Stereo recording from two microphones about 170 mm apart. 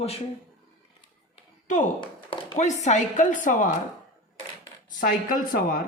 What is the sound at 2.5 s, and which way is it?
Speech, 45° left (ahead or behind).